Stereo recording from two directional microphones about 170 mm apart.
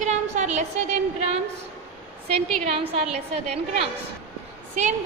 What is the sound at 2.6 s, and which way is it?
Speech, 35° right (ahead or behind).